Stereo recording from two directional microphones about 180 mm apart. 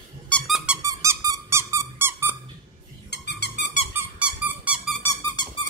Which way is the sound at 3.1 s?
70° left (ahead or behind).